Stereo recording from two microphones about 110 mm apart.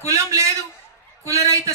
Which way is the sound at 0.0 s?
30° right (ahead or behind).